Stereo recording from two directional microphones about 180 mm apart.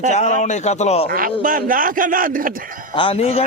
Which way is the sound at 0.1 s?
40° left (ahead or behind).